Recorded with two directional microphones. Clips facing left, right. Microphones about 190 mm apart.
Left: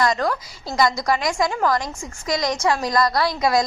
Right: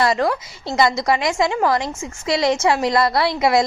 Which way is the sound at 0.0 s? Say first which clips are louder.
Right 3 dB; 30° right (ahead or behind).